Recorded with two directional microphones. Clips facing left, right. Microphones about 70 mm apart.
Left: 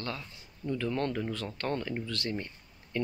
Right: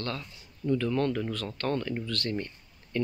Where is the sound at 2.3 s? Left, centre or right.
Centre.